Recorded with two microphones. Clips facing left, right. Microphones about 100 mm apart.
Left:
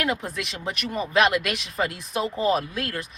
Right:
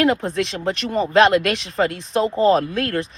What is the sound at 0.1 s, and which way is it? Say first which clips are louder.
Speech: right 7 dB; 60° right (ahead or behind).